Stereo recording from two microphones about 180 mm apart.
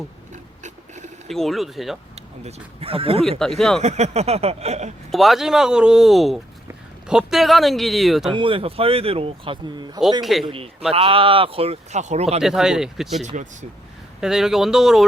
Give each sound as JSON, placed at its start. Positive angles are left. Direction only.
{"t": 0.6, "sound": "mechanisms", "side_deg": -40}
{"t": 1.3, "sound": "speech", "side_deg": 0}
{"t": 2.1, "sound": "speech", "side_deg": -35}
{"t": 3.2, "sound": "speech", "side_deg": 5}
{"t": 3.8, "sound": "speech", "side_deg": -40}
{"t": 5.1, "sound": "speech", "side_deg": 0}
{"t": 8.3, "sound": "speech", "side_deg": -30}
{"t": 12.4, "sound": "speech", "side_deg": 0}
{"t": 13.2, "sound": "speech", "side_deg": -45}
{"t": 14.2, "sound": "speech", "side_deg": -5}